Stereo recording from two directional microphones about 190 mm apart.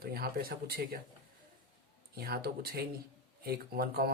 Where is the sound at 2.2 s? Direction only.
55° right (ahead or behind).